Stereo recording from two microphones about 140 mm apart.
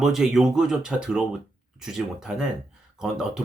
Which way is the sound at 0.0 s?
5° right (ahead or behind).